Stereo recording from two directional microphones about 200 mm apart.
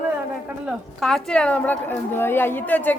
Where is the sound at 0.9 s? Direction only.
Centre (ahead or behind).